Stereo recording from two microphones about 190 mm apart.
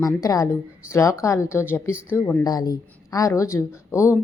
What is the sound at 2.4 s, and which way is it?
A woman's voice, 20° left (ahead or behind).